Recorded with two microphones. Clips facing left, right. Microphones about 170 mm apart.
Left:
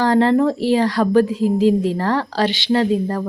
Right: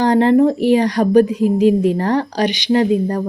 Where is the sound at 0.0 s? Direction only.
20° right (ahead or behind).